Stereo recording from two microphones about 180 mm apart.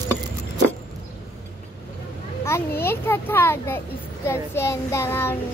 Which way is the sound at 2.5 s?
15° left (ahead or behind).